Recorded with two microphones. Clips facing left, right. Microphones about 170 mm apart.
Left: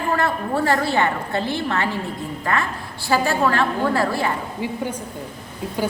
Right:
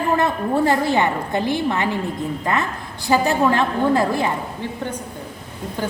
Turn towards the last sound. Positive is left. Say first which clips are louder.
# left 2 dB
turn(degrees=10)  # may be behind; listen again after turning